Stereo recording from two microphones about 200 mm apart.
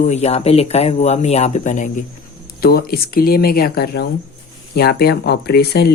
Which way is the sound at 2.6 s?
50° left (ahead or behind).